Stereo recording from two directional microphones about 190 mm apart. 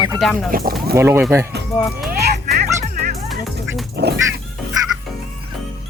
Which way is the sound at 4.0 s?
60° right (ahead or behind).